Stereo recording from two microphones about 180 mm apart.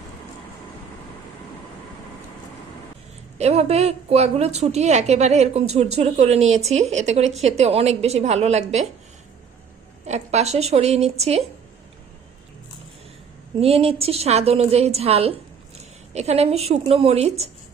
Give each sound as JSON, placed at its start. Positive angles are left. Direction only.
{"t": 3.3, "sound": "a woman's voice", "side_deg": -35}
{"t": 10.1, "sound": "a woman's voice", "side_deg": -35}
{"t": 13.6, "sound": "a woman's voice", "side_deg": -35}